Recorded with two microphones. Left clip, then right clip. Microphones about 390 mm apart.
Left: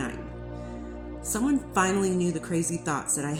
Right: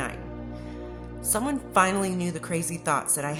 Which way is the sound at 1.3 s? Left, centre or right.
Right.